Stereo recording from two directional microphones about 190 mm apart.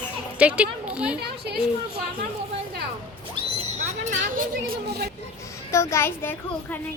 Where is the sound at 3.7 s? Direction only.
40° right (ahead or behind).